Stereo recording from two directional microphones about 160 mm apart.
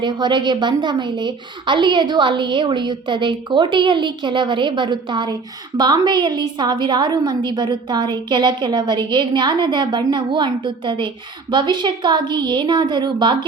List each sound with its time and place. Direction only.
0.0 s a woman's voice: 30° right (ahead or behind)